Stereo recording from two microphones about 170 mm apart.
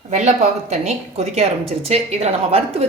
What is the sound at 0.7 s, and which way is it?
A woman's voice, 40° right (ahead or behind).